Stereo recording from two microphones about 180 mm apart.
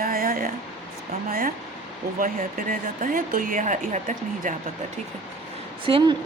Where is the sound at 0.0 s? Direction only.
55° right (ahead or behind).